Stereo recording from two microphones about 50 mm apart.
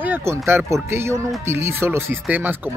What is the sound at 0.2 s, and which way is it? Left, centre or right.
Speech, right.